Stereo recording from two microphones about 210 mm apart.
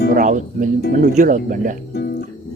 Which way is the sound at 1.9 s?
50° left (ahead or behind).